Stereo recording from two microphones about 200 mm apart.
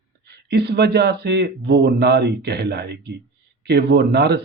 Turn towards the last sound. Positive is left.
turn(degrees=-55)  # may be behind; listen again after turning